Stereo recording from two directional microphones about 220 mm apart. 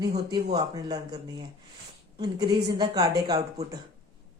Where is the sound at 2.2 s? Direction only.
20° right (ahead or behind).